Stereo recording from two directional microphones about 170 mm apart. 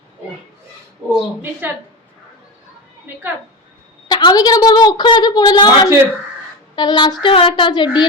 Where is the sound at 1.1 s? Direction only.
10° right (ahead or behind).